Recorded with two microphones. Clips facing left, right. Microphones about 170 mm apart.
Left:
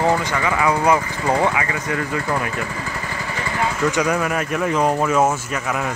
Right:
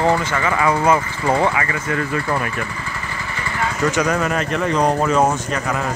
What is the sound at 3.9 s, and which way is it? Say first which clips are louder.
Speech: right 1 dB; 10° left (ahead or behind).